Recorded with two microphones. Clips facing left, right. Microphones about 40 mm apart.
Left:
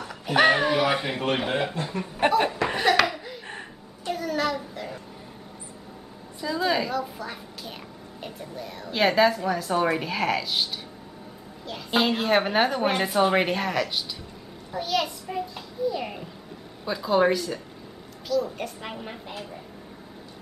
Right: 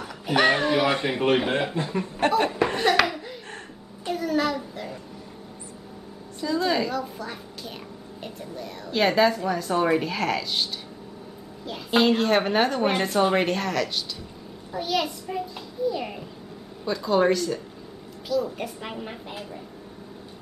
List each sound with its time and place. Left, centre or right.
0.1 s a woman's voice: centre
2.1 s a woman's voice: centre
2.7 s laughter: centre
4.0 s a sound: centre
6.4 s a woman's voice: centre
14.7 s a child's voice: centre
18.3 s a woman's voice: centre